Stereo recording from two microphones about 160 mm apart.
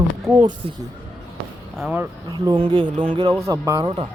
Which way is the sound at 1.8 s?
10° right (ahead or behind).